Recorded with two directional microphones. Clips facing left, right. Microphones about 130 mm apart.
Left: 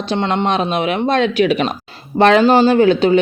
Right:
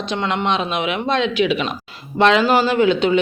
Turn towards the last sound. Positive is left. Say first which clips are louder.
# left 4 dB
turn(degrees=40)  # may be behind; listen again after turning